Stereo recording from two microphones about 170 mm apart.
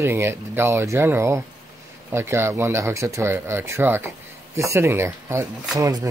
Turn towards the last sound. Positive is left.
turn(degrees=-20)  # may be behind; listen again after turning